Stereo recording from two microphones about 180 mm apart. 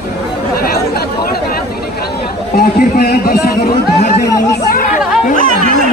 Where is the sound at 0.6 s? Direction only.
60° left (ahead or behind).